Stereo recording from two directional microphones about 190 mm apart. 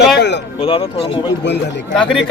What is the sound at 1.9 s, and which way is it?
Speech, 5° left (ahead or behind).